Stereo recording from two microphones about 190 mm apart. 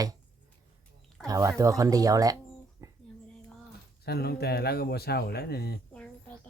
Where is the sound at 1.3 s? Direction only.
20° right (ahead or behind).